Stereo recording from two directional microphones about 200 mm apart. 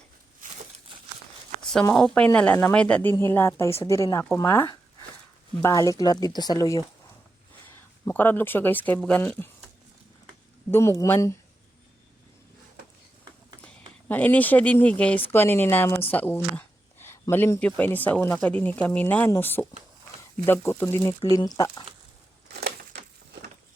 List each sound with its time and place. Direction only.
1.8 s speech: 5° left (ahead or behind); by 6.8 s 20° left (ahead or behind)
8.0 s speech: 10° left (ahead or behind)
10.7 s speech: 15° left (ahead or behind)
14.1 s speech: 10° left (ahead or behind)